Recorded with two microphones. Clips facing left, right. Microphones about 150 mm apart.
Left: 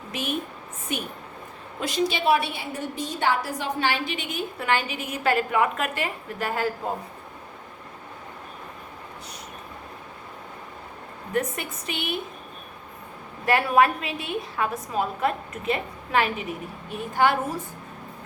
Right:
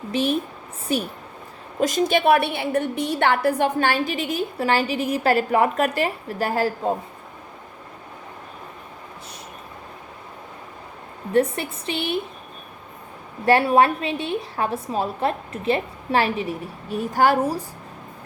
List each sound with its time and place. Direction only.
0.1 s a woman's voice: 35° right (ahead or behind)
1.8 s a woman's voice: 45° right (ahead or behind)
11.3 s a woman's voice: 30° right (ahead or behind)
13.4 s a woman's voice: 30° right (ahead or behind)